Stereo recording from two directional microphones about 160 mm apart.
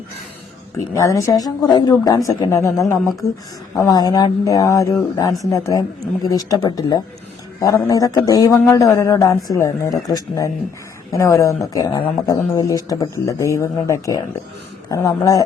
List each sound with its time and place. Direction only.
0.9 s speech: 20° left (ahead or behind)